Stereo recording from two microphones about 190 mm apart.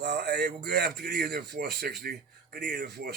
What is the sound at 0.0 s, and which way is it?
A man's voice, 60° right (ahead or behind).